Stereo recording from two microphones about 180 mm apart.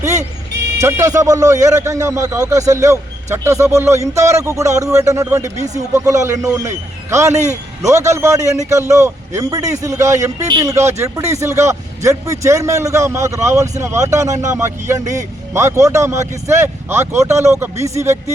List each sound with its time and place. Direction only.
0.8 s a man's voice: 15° right (ahead or behind)